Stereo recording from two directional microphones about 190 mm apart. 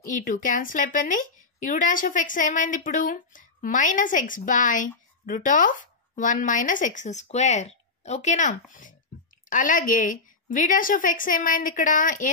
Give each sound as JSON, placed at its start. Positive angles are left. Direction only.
{"t": 0.0, "sound": "a woman's voice", "side_deg": 45}